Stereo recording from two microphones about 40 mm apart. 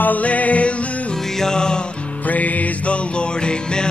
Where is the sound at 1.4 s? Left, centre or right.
Centre.